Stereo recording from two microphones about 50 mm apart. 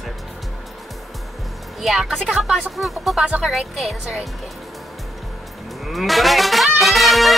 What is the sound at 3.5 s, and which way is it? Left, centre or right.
Speech, centre.